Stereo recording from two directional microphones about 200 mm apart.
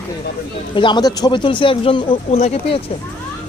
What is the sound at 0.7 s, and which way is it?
Speech, 25° left (ahead or behind).